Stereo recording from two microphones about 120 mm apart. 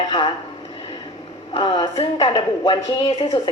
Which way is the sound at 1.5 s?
50° left (ahead or behind).